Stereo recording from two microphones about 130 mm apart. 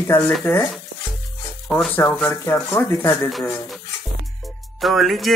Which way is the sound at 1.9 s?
15° left (ahead or behind).